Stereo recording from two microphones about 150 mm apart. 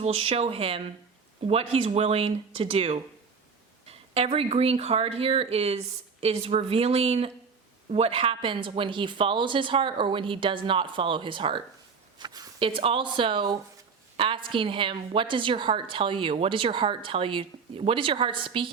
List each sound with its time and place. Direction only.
0.0 s a woman's voice: 40° right (ahead or behind)